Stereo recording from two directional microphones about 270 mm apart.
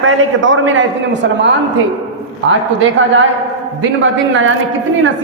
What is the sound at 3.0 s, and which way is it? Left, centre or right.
Speech, right.